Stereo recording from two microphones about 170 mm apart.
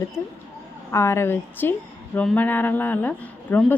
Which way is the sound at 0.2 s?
15° left (ahead or behind).